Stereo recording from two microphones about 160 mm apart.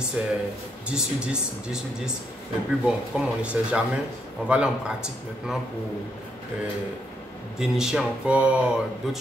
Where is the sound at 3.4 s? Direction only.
5° right (ahead or behind).